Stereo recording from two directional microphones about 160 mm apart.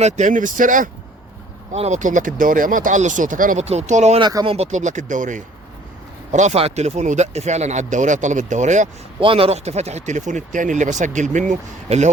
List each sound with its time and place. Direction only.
0.0 s speech: 50° right (ahead or behind)
1.7 s speech: 45° right (ahead or behind)
3.7 s speech: 45° right (ahead or behind)
4.2 s speech: 25° right (ahead or behind)
4.4 s speech: 40° right (ahead or behind)
9.2 s speech: 35° right (ahead or behind)